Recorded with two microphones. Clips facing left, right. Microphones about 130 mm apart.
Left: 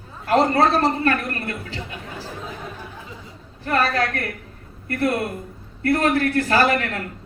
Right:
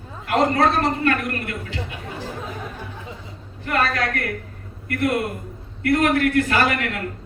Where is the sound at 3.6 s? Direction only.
30° left (ahead or behind).